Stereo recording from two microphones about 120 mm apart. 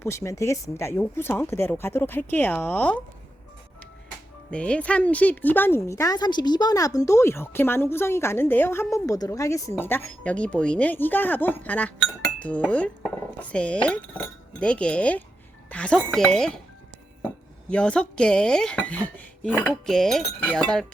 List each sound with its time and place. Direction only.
0.0 s speech: 20° left (ahead or behind)
4.5 s speech: 10° left (ahead or behind)
17.7 s speech: 10° left (ahead or behind)